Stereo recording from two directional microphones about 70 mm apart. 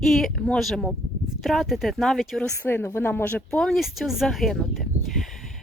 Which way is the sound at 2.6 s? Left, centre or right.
Left.